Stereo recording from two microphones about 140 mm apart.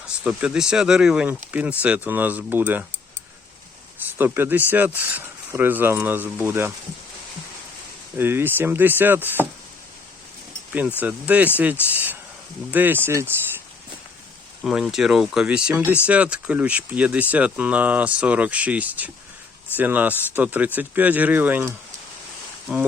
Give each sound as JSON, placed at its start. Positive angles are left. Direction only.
{"t": 0.3, "sound": "speech", "side_deg": -5}
{"t": 4.2, "sound": "speech", "side_deg": -15}
{"t": 8.2, "sound": "speech", "side_deg": -15}
{"t": 10.7, "sound": "speech", "side_deg": -10}
{"t": 14.6, "sound": "speech", "side_deg": -5}